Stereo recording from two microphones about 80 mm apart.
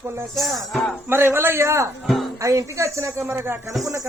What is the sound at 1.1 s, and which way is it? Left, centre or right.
Speech, right.